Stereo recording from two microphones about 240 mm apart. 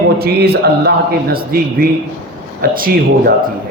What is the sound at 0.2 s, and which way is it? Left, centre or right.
A man's voice, right.